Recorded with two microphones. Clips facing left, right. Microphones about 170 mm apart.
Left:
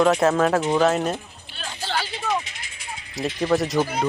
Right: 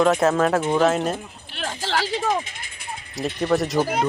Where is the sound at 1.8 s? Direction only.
90° right.